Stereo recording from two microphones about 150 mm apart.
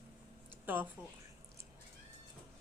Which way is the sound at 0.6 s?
10° right (ahead or behind).